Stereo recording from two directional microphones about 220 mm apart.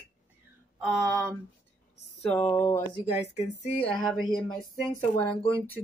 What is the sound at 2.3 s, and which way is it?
Speech, 5° left (ahead or behind).